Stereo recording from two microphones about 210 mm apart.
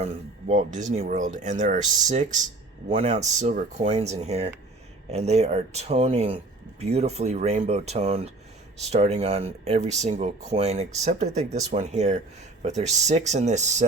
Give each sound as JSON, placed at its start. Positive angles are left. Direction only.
{"t": 0.0, "sound": "speech", "side_deg": -30}